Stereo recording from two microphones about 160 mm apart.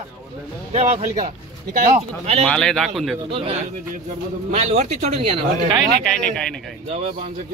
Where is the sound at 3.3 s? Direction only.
35° right (ahead or behind).